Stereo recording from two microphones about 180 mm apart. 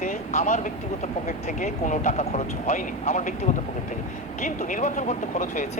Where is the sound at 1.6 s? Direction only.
45° left (ahead or behind).